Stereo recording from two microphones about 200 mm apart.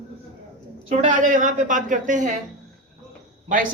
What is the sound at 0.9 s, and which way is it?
A woman's voice, 40° right (ahead or behind).